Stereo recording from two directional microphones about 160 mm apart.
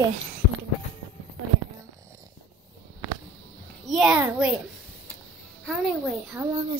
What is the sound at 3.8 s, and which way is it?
Speech, centre (ahead or behind).